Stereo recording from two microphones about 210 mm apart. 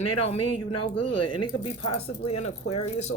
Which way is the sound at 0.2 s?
25° left (ahead or behind).